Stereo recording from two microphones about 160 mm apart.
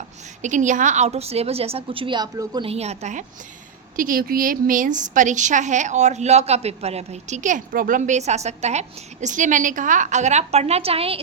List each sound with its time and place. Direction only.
0.4 s a woman's voice: 50° right (ahead or behind); by 2.6 s 25° right (ahead or behind)
2.6 s a woman's voice: 40° right (ahead or behind)
3.9 s a woman's voice: 60° right (ahead or behind); by 11.2 s 35° right (ahead or behind)